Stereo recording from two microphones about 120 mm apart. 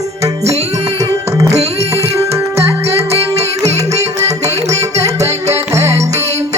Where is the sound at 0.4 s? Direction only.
60° right (ahead or behind).